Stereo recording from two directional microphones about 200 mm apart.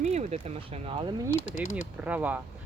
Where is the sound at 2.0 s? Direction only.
5° right (ahead or behind).